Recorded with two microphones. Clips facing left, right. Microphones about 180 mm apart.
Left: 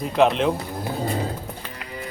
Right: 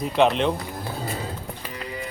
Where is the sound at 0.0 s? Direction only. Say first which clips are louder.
Left 1 dB; centre (ahead or behind).